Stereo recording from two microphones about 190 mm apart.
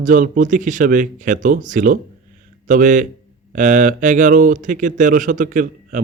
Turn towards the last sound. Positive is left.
turn(degrees=-45)  # may be behind; listen again after turning